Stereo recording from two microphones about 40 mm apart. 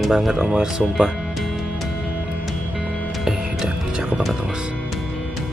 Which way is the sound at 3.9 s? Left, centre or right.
Right.